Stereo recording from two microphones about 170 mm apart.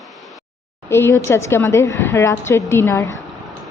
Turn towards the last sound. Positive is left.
turn(degrees=15)  # may be behind; listen again after turning